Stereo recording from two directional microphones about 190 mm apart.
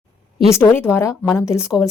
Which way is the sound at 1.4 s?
5° right (ahead or behind).